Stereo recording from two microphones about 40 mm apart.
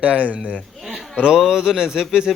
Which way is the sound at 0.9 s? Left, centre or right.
Centre.